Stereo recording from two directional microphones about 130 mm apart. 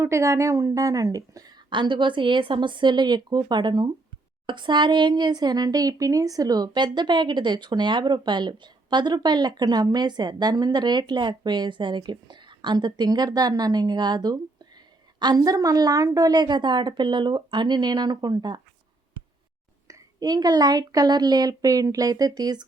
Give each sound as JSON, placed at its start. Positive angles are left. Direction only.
{"t": 0.0, "sound": "speech", "side_deg": -25}
{"t": 19.9, "sound": "speech", "side_deg": -30}